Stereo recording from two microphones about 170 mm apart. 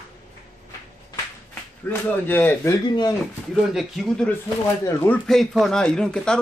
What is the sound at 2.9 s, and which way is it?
Speech, 25° left (ahead or behind).